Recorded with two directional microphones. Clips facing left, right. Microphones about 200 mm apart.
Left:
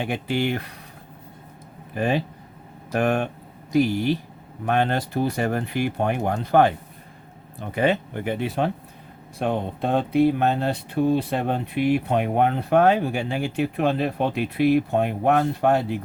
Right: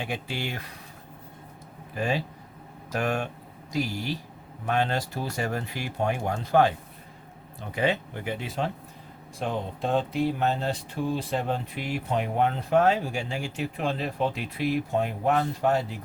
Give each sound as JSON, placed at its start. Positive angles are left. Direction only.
{"t": 0.0, "sound": "speech", "side_deg": 55}
{"t": 2.0, "sound": "speech", "side_deg": 55}